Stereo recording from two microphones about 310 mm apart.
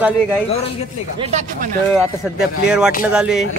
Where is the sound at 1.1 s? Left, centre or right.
Centre.